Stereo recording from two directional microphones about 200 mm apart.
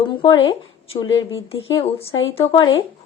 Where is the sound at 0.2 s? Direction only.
25° left (ahead or behind).